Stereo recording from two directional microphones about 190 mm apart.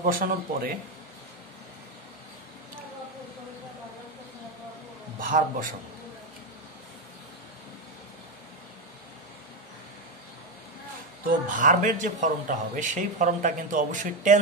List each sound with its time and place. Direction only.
0.0 s speech: 45° right (ahead or behind)
5.2 s speech: 45° right (ahead or behind)
11.2 s speech: 45° right (ahead or behind)